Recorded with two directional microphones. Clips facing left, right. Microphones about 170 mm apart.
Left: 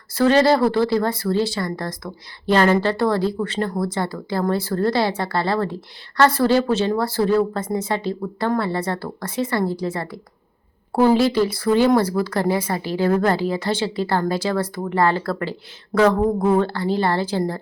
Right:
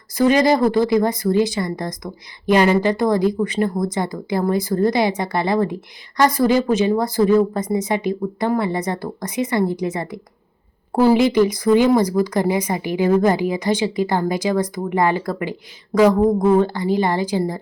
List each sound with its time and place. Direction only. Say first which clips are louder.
0.1 s speech: even; 15° right (ahead or behind)